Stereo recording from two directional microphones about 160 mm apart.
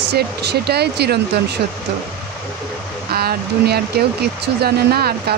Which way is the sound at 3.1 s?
75° right (ahead or behind).